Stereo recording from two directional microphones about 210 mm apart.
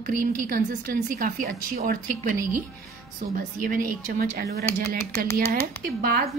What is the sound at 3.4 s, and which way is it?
A woman's voice, 40° right (ahead or behind).